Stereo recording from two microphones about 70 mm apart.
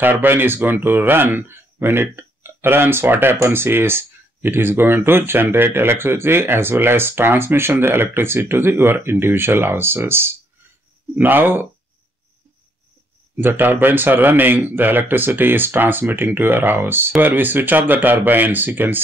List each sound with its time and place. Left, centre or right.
0.0 s speech: right
13.4 s speech: right